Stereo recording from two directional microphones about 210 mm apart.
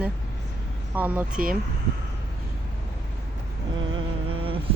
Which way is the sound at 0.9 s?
5° right (ahead or behind).